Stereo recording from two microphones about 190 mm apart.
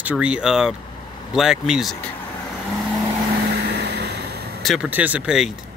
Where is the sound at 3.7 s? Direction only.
60° right (ahead or behind).